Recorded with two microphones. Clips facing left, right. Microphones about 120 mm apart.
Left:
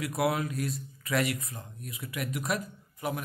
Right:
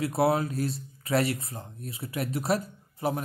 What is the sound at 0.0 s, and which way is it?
Speech, 30° right (ahead or behind).